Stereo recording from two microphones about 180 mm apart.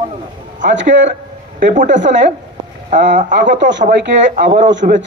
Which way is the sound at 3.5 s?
80° right.